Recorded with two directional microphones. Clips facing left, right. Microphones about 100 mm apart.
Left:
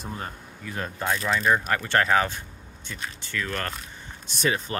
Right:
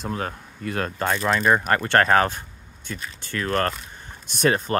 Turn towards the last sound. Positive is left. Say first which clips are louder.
# right 5 dB
turn(degrees=-50)  # may be behind; listen again after turning